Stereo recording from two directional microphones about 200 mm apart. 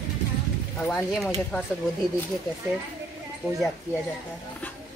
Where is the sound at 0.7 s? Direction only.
5° left (ahead or behind).